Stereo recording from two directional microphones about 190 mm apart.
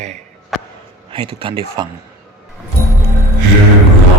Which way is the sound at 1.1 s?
25° right (ahead or behind).